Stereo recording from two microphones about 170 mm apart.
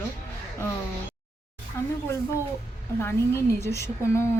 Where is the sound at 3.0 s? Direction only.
15° left (ahead or behind).